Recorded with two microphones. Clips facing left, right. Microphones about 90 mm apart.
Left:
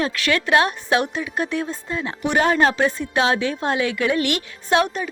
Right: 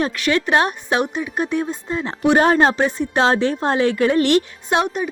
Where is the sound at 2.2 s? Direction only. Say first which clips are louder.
Right 4 dB; 35° right (ahead or behind).